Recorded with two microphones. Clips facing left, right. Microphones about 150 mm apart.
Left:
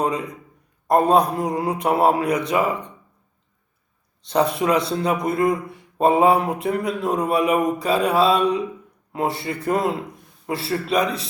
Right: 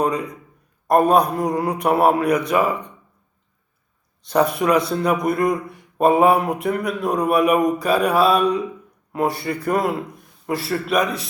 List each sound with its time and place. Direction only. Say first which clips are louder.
0.0 s speech: right 2 dB; 25° left (ahead or behind)
4.3 s speech: right 2 dB; 25° left (ahead or behind)